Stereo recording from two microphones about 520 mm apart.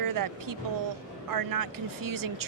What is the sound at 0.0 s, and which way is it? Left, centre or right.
Speech, right.